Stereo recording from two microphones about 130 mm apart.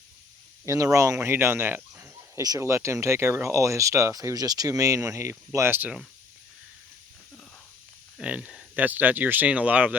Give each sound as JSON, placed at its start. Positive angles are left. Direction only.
{"t": 0.6, "sound": "speech", "side_deg": -25}
{"t": 8.2, "sound": "speech", "side_deg": -10}